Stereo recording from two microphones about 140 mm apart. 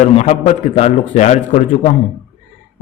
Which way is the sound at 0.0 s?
55° left (ahead or behind).